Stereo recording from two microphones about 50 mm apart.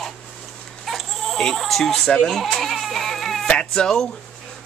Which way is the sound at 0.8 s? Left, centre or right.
Centre.